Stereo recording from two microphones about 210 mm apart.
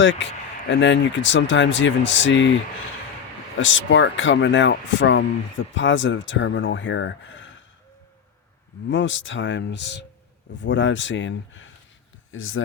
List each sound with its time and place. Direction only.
0.0 s speech: 60° left (ahead or behind)
3.6 s speech: 65° left (ahead or behind)
8.9 s speech: 60° left (ahead or behind)